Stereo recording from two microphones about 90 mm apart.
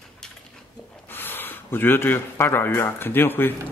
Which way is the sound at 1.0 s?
25° left (ahead or behind).